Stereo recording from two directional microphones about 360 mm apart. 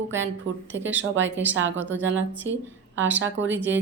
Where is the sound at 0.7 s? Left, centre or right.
Right.